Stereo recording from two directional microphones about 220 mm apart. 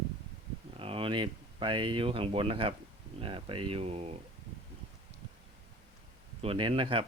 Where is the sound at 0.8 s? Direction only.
25° right (ahead or behind).